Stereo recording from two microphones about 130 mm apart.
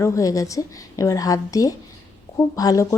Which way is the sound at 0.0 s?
25° left (ahead or behind).